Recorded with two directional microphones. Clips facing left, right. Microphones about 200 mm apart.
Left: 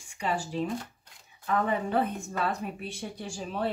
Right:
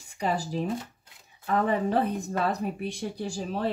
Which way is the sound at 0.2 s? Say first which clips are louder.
Right 2 dB; 40° right (ahead or behind).